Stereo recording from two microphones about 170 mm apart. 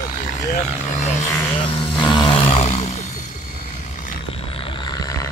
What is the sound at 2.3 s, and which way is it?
Roar, 35° left (ahead or behind).